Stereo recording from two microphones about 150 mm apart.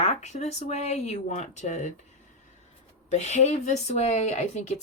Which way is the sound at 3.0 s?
50° left (ahead or behind).